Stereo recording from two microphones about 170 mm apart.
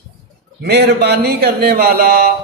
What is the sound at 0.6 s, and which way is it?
A man's voice, 70° right (ahead or behind).